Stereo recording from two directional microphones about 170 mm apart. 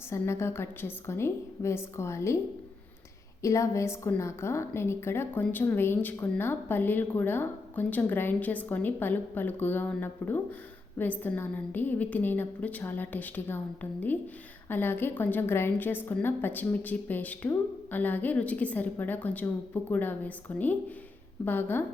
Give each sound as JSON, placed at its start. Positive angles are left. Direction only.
{"t": 0.1, "sound": "a woman's voice", "side_deg": 15}
{"t": 3.4, "sound": "a woman's voice", "side_deg": 20}
{"t": 14.7, "sound": "a woman's voice", "side_deg": 10}